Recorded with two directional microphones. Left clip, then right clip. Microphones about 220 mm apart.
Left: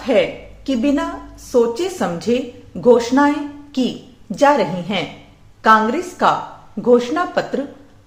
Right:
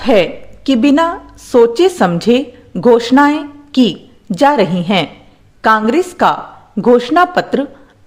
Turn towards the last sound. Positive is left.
turn(degrees=-45)  # may be behind; listen again after turning